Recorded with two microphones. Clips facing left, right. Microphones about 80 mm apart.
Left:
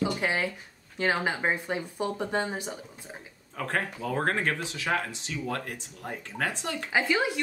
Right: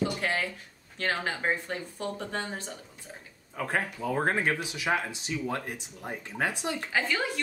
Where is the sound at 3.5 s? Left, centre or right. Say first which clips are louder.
Even; centre.